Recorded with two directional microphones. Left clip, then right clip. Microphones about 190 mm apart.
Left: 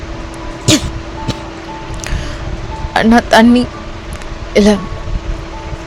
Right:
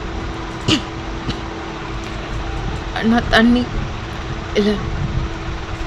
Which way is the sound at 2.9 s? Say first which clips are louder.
Left 7 dB; 50° left (ahead or behind).